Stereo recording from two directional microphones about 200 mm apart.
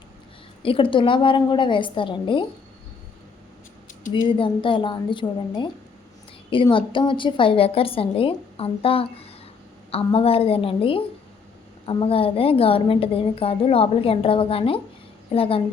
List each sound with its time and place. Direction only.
0.6 s a woman's voice: 25° left (ahead or behind)
4.3 s a woman's voice: 25° left (ahead or behind)